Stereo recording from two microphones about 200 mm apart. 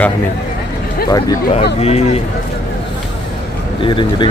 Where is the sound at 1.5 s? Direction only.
30° left (ahead or behind).